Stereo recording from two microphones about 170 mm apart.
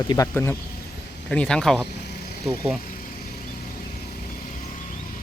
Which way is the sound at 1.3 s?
5° left (ahead or behind).